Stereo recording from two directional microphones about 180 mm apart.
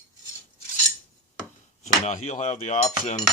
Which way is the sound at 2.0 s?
40° left (ahead or behind).